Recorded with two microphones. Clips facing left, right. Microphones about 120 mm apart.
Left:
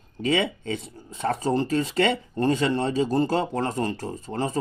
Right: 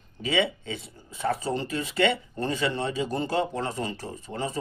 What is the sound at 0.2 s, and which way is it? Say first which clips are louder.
Speech: left 2 dB; 45° left (ahead or behind).